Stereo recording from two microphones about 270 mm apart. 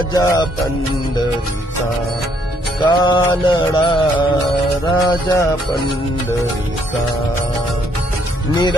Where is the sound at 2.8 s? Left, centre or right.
Centre.